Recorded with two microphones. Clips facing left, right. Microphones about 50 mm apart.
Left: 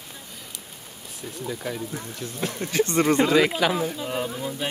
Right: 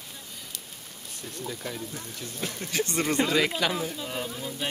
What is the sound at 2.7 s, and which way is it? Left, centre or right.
Speech, left.